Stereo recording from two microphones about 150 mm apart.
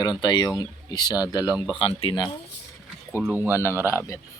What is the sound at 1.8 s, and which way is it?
Speech, 40° left (ahead or behind).